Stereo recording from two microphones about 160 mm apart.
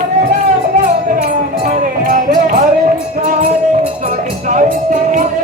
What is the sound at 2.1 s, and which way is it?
Music, 55° right (ahead or behind).